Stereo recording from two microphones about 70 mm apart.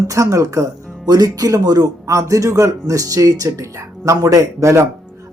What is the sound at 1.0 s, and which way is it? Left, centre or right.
Speech, right.